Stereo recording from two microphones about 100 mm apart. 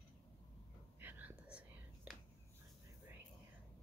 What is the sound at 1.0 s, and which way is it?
Whispering, 20° right (ahead or behind).